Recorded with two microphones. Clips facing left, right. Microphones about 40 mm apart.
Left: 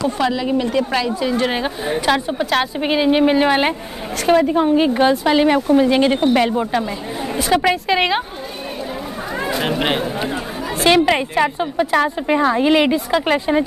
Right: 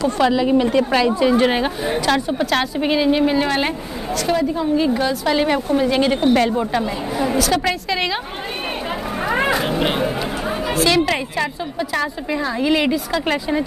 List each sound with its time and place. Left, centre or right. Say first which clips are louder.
0.2 s speech: right 5 dB; centre
2.0 s a woman's voice: left 1 dB; centre
4.3 s a woman's voice: left 6 dB; left
5.2 s a woman's voice: left 3 dB; centre
7.3 s a woman's voice: left 6 dB; left
9.3 s a sound: right 5 dB; right
9.8 s speech: even; left
11.1 s a woman's voice: left 5 dB; left